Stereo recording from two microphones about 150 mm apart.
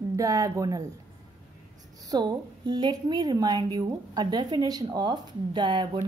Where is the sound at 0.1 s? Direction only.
25° right (ahead or behind).